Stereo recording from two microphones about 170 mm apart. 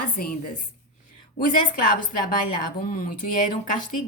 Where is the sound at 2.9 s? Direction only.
50° left (ahead or behind).